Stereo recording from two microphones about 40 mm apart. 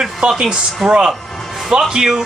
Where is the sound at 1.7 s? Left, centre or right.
Centre.